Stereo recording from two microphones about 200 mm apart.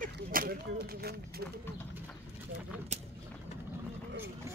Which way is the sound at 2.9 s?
35° right (ahead or behind).